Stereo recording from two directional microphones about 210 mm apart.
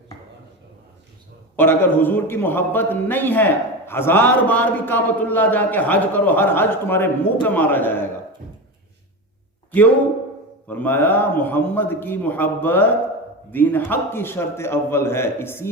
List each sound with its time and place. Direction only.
1.5 s a man's voice: 10° left (ahead or behind)
10.7 s a man's voice: 10° left (ahead or behind)